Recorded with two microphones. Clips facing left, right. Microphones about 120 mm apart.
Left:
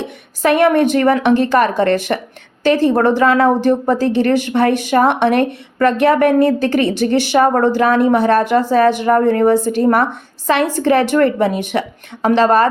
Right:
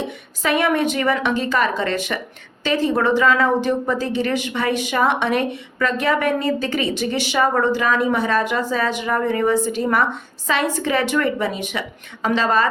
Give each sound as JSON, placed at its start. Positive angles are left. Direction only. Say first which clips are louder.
{"t": 0.4, "sound": "a woman's voice", "louder": "left 7 dB", "side_deg": 50}
{"t": 7.6, "sound": "a woman's voice", "louder": "left 6 dB", "side_deg": 55}